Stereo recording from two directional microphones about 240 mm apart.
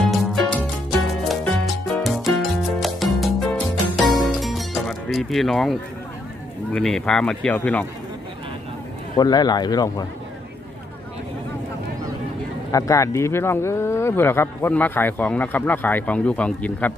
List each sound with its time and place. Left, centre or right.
0.0 s music: centre
6.7 s speech: centre
9.1 s speech: centre
12.7 s speech: centre